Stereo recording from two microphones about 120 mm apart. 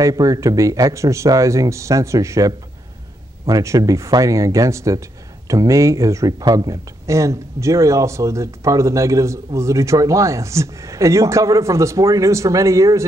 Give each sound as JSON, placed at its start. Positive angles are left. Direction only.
{"t": 0.0, "sound": "a man's voice", "side_deg": -30}